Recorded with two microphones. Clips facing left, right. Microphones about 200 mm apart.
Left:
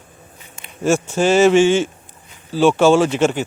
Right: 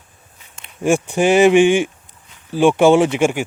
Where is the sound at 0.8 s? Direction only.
15° right (ahead or behind).